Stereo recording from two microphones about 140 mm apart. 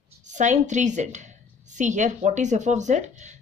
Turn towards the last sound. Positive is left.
turn(degrees=-60)  # may be behind; listen again after turning